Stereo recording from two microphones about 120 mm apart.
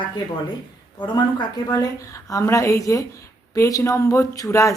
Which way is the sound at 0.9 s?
40° left (ahead or behind).